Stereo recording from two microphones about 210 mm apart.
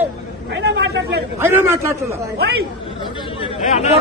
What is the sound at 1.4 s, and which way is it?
Speech, 10° right (ahead or behind).